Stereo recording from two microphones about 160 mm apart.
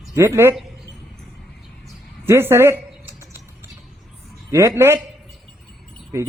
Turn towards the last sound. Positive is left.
turn(degrees=-15)  # may be behind; listen again after turning